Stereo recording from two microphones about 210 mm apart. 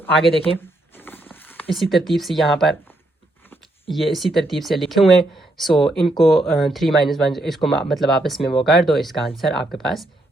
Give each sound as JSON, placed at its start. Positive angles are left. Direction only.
{"t": 0.9, "sound": "a sound", "side_deg": 10}
{"t": 1.7, "sound": "speech", "side_deg": 0}
{"t": 3.8, "sound": "speech", "side_deg": 0}